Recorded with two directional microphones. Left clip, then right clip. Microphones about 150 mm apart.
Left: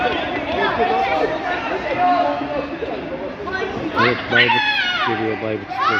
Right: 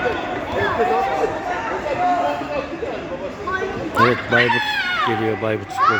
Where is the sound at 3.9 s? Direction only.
45° left (ahead or behind).